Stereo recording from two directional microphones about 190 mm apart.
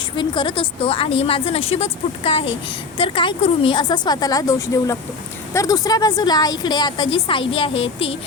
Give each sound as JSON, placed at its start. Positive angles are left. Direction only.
{"t": 0.2, "sound": "a woman's voice", "side_deg": 25}